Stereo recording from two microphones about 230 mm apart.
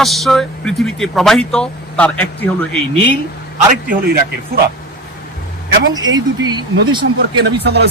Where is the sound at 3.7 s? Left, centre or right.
Right.